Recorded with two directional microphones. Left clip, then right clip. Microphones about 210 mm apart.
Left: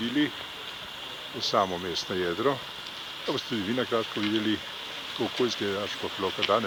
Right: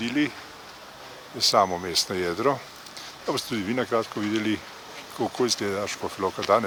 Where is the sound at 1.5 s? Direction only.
30° right (ahead or behind).